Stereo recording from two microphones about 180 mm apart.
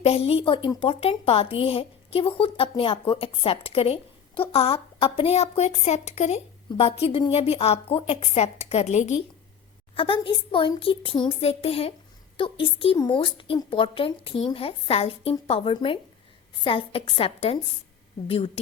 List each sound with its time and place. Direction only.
0.0 s speech: 35° left (ahead or behind)
9.9 s a woman's voice: 30° left (ahead or behind)